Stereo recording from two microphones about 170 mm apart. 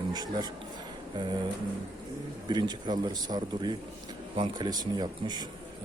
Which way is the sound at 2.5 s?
25° right (ahead or behind).